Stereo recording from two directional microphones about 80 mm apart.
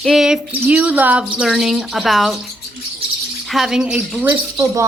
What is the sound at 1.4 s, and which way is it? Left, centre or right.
Speech, centre.